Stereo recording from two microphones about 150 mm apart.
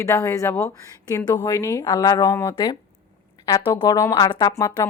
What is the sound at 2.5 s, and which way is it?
A woman's voice, 35° left (ahead or behind).